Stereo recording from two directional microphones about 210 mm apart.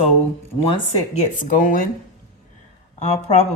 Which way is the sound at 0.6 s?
25° left (ahead or behind).